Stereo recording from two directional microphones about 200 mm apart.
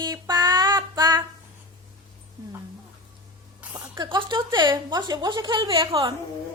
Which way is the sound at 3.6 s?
10° right (ahead or behind).